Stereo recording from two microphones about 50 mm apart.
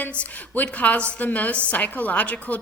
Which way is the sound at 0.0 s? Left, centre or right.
Left.